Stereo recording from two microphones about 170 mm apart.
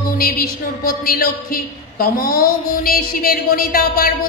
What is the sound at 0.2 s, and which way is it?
A woman's voice, 60° left (ahead or behind).